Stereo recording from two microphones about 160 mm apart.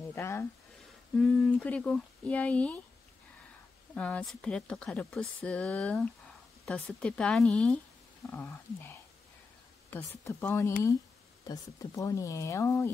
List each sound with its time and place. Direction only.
0.1 s speech: 15° left (ahead or behind)
3.9 s speech: 10° left (ahead or behind)